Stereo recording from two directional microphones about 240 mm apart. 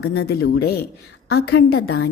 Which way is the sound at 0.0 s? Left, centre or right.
Left.